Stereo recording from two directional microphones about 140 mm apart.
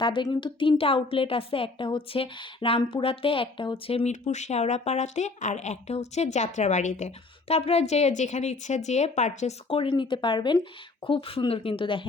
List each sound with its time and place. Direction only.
0.0 s a woman's voice: 35° left (ahead or behind)